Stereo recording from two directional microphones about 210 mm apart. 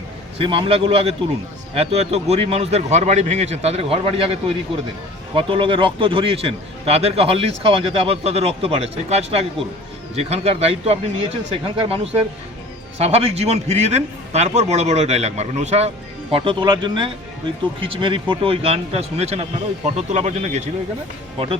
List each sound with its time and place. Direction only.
0.3 s a man's voice: 25° right (ahead or behind)
13.0 s a man's voice: 30° right (ahead or behind)